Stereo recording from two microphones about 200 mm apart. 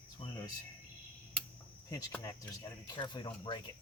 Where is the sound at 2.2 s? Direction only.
20° left (ahead or behind).